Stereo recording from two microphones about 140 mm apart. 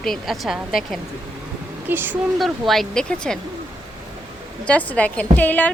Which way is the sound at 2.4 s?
Centre (ahead or behind).